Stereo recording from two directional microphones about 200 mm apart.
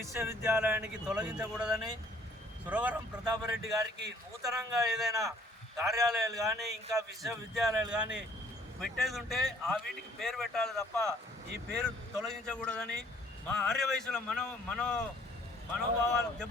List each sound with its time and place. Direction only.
0.0 s speech: 15° right (ahead or behind)
3.2 s speech: 20° right (ahead or behind)
4.7 s a man's voice: centre (ahead or behind)